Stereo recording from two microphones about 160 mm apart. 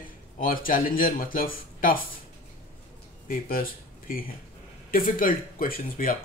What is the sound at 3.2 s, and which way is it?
Speech, 60° left (ahead or behind).